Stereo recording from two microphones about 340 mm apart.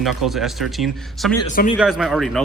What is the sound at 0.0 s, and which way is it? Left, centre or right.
A man's voice, centre.